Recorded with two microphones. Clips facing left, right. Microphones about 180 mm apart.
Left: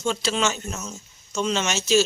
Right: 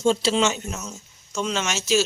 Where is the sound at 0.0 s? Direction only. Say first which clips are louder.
Right 4 dB; 30° right (ahead or behind).